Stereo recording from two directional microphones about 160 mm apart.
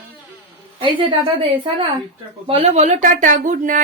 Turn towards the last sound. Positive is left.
turn(degrees=-50)  # may be behind; listen again after turning